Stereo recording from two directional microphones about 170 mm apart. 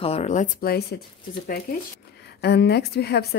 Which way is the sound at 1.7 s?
50° left (ahead or behind).